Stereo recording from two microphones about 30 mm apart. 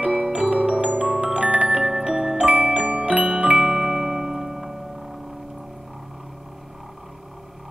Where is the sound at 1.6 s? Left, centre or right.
Centre.